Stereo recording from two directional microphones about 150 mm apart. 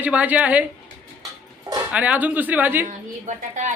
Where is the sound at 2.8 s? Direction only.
55° right (ahead or behind).